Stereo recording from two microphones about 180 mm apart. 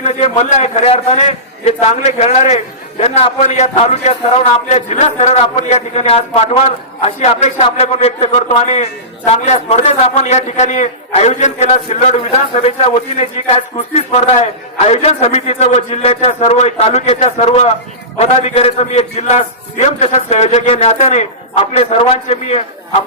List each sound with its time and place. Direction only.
0.0 s a man's voice: 35° left (ahead or behind)